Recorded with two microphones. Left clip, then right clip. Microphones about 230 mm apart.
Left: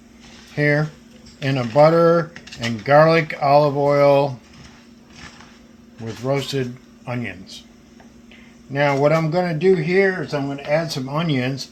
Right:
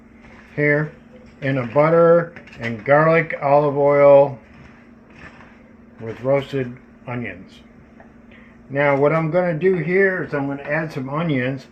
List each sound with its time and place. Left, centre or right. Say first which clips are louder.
0.5 s speech: right 1 dB; left
6.2 s speech: right 3 dB; left
8.7 s speech: even; left